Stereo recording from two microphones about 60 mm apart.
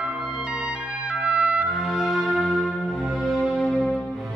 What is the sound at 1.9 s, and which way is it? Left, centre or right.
Music, centre.